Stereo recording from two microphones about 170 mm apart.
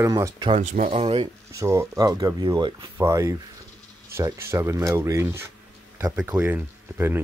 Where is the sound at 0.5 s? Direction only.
40° right (ahead or behind).